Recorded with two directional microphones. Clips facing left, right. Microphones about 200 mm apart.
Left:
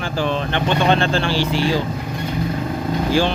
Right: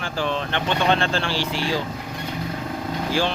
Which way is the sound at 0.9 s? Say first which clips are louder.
Left 5 dB; centre (ahead or behind).